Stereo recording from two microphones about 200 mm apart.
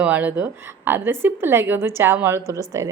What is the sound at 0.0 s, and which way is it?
A woman's voice, 10° right (ahead or behind).